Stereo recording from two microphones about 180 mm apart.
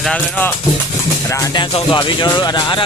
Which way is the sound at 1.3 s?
25° left (ahead or behind).